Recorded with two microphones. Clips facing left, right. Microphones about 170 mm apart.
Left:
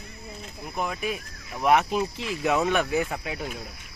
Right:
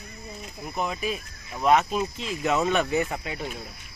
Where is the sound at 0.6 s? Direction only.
Centre (ahead or behind).